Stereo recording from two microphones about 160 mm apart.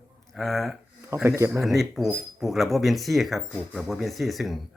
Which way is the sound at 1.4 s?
15° right (ahead or behind).